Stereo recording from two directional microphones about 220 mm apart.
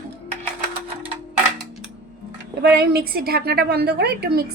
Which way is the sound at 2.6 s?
45° right (ahead or behind).